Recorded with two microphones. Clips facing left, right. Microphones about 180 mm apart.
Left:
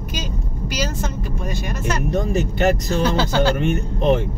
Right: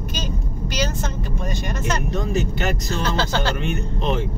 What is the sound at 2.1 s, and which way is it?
Speech, 50° left (ahead or behind).